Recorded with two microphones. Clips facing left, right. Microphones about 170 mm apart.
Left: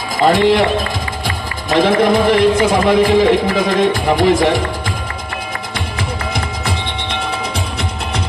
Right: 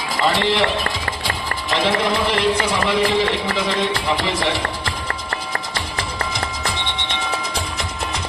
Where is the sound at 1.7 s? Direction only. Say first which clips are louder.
Left 8 dB; 50° left (ahead or behind).